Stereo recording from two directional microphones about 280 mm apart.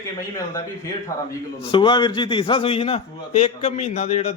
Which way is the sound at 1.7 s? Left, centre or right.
Centre.